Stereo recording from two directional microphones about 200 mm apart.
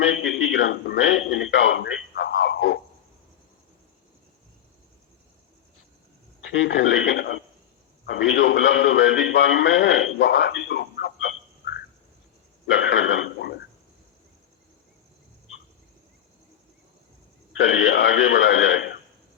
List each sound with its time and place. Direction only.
0.0 s a man's voice: 70° left (ahead or behind)
6.5 s a man's voice: 70° left (ahead or behind)
12.6 s a man's voice: 70° left (ahead or behind)
17.6 s a man's voice: 75° left (ahead or behind)